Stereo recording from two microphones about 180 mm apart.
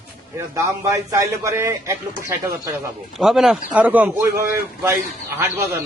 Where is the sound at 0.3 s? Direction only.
15° right (ahead or behind).